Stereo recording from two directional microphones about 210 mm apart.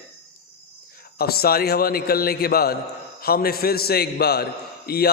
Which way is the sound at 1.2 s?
45° left (ahead or behind).